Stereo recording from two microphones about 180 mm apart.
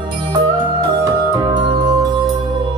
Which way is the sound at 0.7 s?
20° right (ahead or behind).